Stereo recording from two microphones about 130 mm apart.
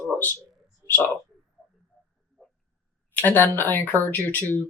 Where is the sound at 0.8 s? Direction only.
20° left (ahead or behind).